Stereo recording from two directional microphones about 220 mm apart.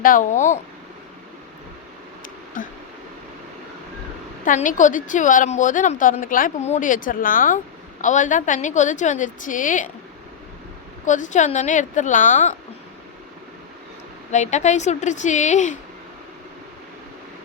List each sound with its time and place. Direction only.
0.0 s a woman's voice: 35° left (ahead or behind)
2.6 s a woman's voice: 40° left (ahead or behind)
4.4 s a woman's voice: 35° left (ahead or behind)
11.0 s a woman's voice: 35° left (ahead or behind)
14.3 s a woman's voice: 30° left (ahead or behind)